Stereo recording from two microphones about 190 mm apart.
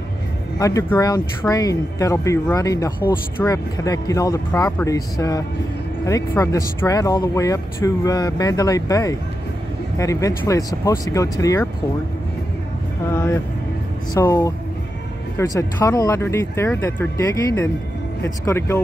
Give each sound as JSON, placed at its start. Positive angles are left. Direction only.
{"t": 0.6, "sound": "speech", "side_deg": 15}
{"t": 13.1, "sound": "speech", "side_deg": 15}